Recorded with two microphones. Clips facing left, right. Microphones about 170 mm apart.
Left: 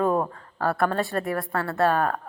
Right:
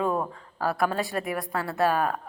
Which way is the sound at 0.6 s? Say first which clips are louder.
Left 2 dB; 10° right (ahead or behind).